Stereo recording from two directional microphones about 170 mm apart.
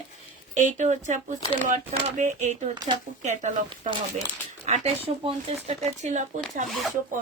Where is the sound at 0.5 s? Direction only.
45° right (ahead or behind).